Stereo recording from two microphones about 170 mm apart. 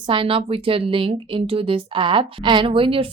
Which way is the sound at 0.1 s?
30° right (ahead or behind).